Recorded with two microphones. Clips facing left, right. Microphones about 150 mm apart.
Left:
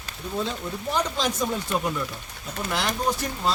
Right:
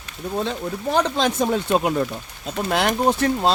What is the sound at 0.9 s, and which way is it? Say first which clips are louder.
Speech: right 6 dB; 60° right (ahead or behind).